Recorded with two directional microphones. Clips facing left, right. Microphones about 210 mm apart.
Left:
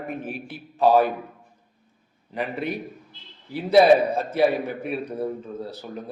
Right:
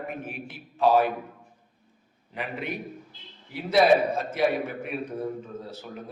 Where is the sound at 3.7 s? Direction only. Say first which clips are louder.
Left 4 dB; 35° left (ahead or behind).